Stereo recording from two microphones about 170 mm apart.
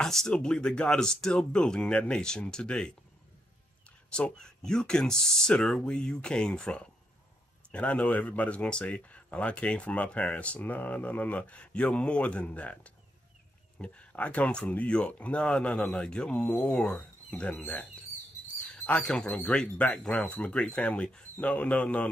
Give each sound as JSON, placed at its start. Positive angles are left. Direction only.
{"t": 0.0, "sound": "speech", "side_deg": 0}
{"t": 4.1, "sound": "speech", "side_deg": 5}
{"t": 18.9, "sound": "speech", "side_deg": 5}